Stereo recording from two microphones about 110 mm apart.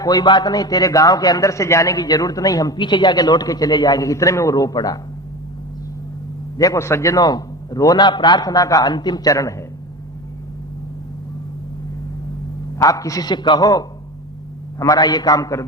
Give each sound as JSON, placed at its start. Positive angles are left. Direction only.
{"t": 0.0, "sound": "a man's voice", "side_deg": 35}
{"t": 6.6, "sound": "a man's voice", "side_deg": 30}
{"t": 12.7, "sound": "a man's voice", "side_deg": 30}